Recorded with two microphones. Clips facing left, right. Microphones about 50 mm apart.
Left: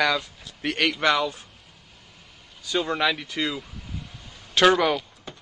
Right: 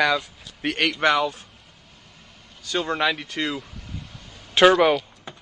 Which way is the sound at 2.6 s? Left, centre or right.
Centre.